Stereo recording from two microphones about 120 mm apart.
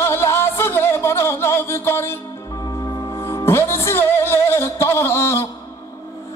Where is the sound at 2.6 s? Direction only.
30° left (ahead or behind).